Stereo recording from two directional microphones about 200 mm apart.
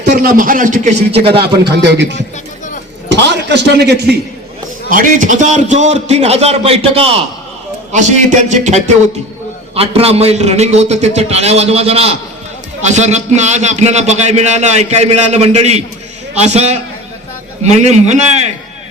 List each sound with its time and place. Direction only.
0.0 s a man's voice: 45° right (ahead or behind); by 1.5 s 30° right (ahead or behind)
3.1 s a man's voice: 60° right (ahead or behind)
4.9 s a man's voice: 40° right (ahead or behind)